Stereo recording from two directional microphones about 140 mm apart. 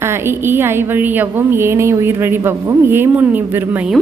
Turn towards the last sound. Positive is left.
turn(degrees=-15)  # may be behind; listen again after turning